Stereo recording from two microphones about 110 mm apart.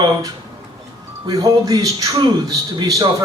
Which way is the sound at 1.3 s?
35° right (ahead or behind).